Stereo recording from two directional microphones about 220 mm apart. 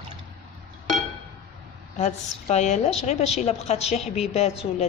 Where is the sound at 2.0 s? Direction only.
30° left (ahead or behind).